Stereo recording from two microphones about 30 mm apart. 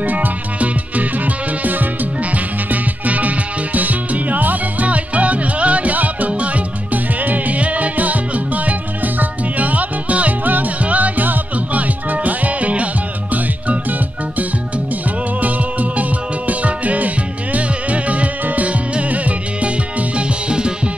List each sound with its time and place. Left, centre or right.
0.0 s music: right
2.3 s music: right
4.8 s music: right
10.4 s music: right
13.3 s music: right
15.4 s music: right